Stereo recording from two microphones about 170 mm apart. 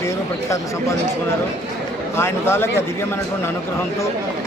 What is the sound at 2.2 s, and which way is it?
Speech, 15° left (ahead or behind).